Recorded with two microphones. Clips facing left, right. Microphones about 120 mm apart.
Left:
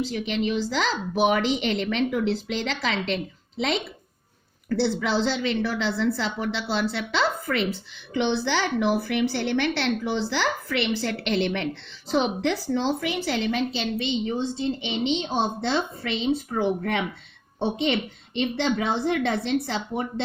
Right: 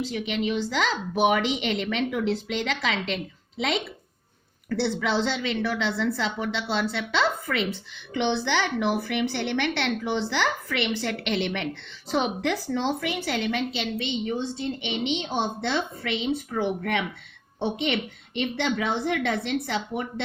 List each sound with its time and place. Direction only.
0.0 s a woman's voice: 30° left (ahead or behind)
4.7 s a woman's voice: 30° left (ahead or behind)